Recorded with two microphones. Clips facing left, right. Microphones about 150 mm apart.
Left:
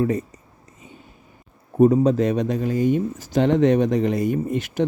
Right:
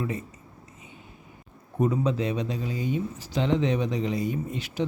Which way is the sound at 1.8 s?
45° left (ahead or behind).